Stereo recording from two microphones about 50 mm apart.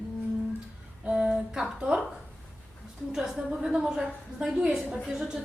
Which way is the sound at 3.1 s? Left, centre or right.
Centre.